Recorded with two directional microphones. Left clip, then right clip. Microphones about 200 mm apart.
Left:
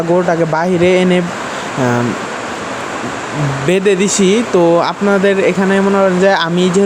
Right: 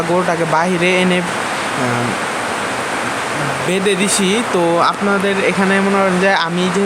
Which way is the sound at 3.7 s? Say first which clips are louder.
Left 5 dB; 35° left (ahead or behind).